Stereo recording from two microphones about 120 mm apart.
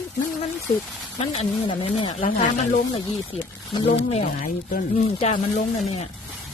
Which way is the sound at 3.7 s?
60° left (ahead or behind).